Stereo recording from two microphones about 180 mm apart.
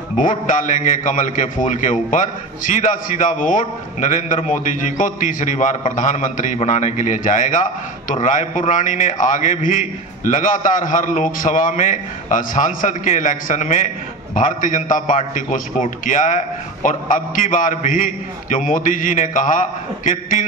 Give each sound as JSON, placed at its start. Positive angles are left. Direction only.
{"t": 0.2, "sound": "a man's voice", "side_deg": 45}